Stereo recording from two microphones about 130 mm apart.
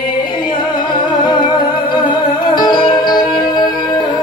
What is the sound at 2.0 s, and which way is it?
Music, 35° left (ahead or behind).